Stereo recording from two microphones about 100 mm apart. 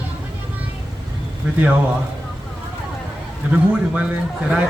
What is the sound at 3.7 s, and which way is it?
Speech, 10° right (ahead or behind).